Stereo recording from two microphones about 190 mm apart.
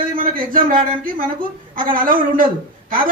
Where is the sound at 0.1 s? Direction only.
45° right (ahead or behind).